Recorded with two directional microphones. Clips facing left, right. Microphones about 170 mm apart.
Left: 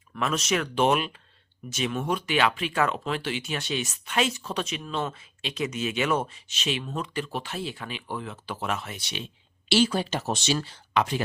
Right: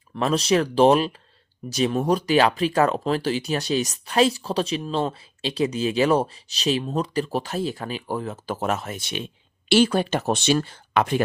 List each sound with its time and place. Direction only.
0.2 s speech: 35° right (ahead or behind); by 11.2 s 55° right (ahead or behind)